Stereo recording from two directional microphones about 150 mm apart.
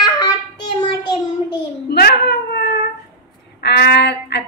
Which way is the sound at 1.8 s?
90° left.